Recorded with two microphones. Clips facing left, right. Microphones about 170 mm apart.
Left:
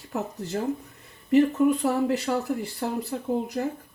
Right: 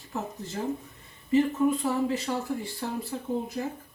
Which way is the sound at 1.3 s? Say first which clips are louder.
Left 4 dB; 70° left (ahead or behind).